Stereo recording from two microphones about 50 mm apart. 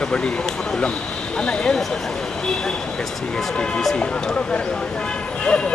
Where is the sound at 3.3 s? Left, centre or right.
Centre.